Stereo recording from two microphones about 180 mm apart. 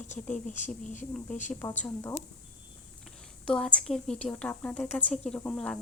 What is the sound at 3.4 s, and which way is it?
Speech, 5° left (ahead or behind).